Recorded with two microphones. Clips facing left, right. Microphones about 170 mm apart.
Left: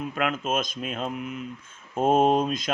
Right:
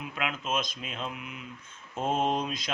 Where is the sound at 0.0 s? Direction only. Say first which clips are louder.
Left 7 dB; 45° left (ahead or behind).